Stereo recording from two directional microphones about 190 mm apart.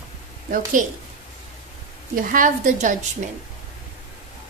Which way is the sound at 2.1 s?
45° right (ahead or behind).